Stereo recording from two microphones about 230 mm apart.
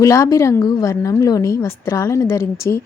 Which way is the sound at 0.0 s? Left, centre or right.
Centre.